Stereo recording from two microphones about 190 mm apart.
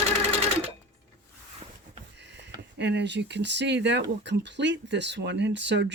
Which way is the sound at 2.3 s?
65° right (ahead or behind).